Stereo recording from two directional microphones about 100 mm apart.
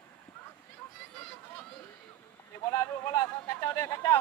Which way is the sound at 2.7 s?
35° left (ahead or behind).